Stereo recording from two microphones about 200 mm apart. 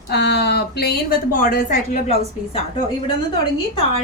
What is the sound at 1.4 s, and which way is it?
Speech, 45° left (ahead or behind).